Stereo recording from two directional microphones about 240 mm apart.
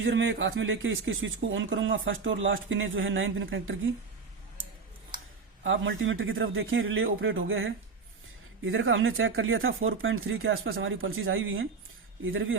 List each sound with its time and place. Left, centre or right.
0.0 s speech: right
5.6 s speech: right